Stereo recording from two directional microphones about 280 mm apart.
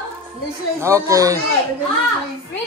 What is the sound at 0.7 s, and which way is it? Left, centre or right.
Speech, centre.